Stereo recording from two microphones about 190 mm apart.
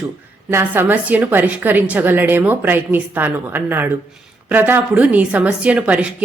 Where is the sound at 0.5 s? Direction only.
10° right (ahead or behind).